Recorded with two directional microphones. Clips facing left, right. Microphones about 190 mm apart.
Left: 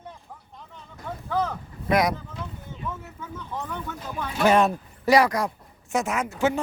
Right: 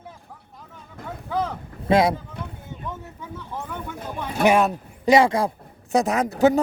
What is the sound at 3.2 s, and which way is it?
Speech, 15° right (ahead or behind).